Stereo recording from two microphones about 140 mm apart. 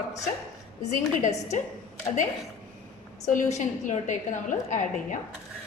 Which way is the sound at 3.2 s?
60° left (ahead or behind).